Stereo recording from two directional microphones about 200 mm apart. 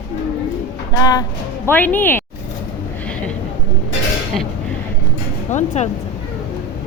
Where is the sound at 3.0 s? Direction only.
5° left (ahead or behind).